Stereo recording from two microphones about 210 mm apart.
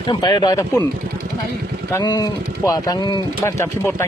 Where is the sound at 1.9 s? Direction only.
15° left (ahead or behind).